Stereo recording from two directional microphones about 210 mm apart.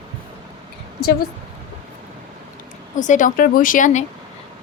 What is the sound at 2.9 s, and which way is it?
A woman's voice, 35° left (ahead or behind).